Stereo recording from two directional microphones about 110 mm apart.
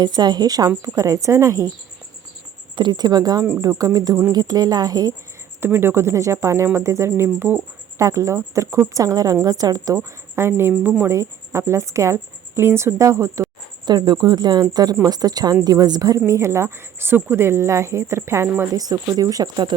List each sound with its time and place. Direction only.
0.0 s speech: 40° right (ahead or behind)
2.7 s speech: 45° right (ahead or behind)
5.5 s speech: 20° right (ahead or behind)
18.8 s speech: 35° right (ahead or behind)